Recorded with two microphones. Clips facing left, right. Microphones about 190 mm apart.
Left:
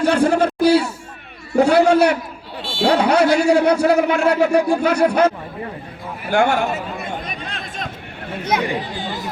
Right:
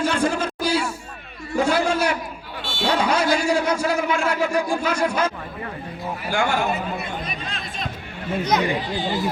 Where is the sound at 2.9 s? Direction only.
65° left (ahead or behind).